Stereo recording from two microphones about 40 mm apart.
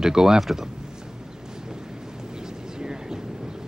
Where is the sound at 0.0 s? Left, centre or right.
Centre.